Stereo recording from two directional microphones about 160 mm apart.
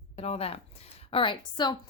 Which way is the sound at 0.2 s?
40° left (ahead or behind).